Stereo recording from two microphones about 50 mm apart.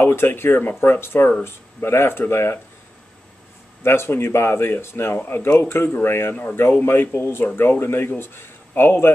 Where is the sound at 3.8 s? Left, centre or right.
Left.